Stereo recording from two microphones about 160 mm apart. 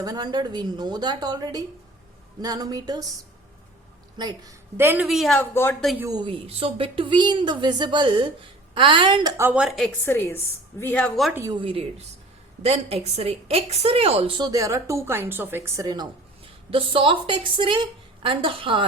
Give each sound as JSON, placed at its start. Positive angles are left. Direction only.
{"t": 0.0, "sound": "a woman's voice", "side_deg": -25}
{"t": 4.2, "sound": "a woman's voice", "side_deg": -25}
{"t": 5.0, "sound": "speech", "side_deg": 0}
{"t": 5.4, "sound": "a woman's voice", "side_deg": 15}
{"t": 6.2, "sound": "speech", "side_deg": -35}
{"t": 9.4, "sound": "speech", "side_deg": -10}
{"t": 10.1, "sound": "a woman's voice", "side_deg": 15}
{"t": 11.6, "sound": "a woman's voice", "side_deg": -35}
{"t": 16.7, "sound": "speech", "side_deg": -35}